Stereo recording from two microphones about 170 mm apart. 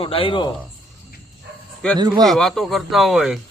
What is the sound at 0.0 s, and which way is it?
Speech, 30° left (ahead or behind).